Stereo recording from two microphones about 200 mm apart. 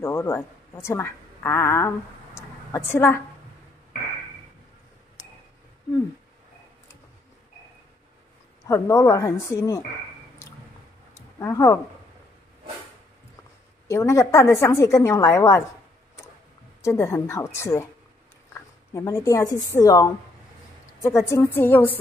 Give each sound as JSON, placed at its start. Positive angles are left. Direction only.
{"t": 0.0, "sound": "a woman's voice", "side_deg": 15}
{"t": 8.6, "sound": "a woman's voice", "side_deg": 15}
{"t": 10.4, "sound": "squish", "side_deg": 15}
{"t": 11.1, "sound": "speech", "side_deg": 15}
{"t": 13.8, "sound": "a woman's voice", "side_deg": 15}
{"t": 16.8, "sound": "a woman's voice", "side_deg": 15}
{"t": 18.9, "sound": "a woman's voice", "side_deg": 15}
{"t": 21.3, "sound": "a woman's voice", "side_deg": 10}